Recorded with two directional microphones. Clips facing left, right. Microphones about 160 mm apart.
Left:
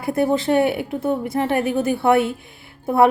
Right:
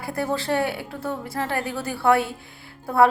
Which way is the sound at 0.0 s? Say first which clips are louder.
Left 7 dB; 20° left (ahead or behind).